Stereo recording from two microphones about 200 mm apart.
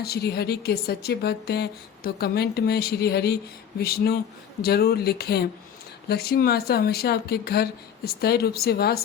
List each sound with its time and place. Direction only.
0.0 s a woman's voice: 55° left (ahead or behind)